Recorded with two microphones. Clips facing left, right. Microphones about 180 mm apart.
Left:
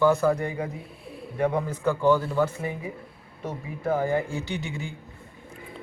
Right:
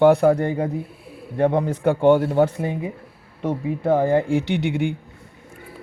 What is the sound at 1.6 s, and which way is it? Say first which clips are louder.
Speech: right 6 dB; 70° right (ahead or behind).